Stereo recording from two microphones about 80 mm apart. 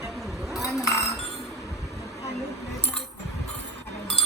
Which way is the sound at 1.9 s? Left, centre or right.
Left.